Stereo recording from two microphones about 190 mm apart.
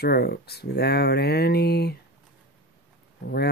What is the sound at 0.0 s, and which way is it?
Speech, 55° left (ahead or behind).